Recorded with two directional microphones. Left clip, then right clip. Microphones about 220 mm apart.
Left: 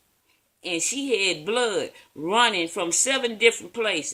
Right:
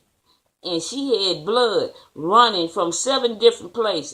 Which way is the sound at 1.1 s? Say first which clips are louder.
Right 4 dB; 55° left (ahead or behind).